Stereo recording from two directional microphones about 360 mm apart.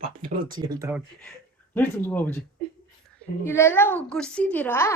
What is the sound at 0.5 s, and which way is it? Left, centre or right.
Speech, centre.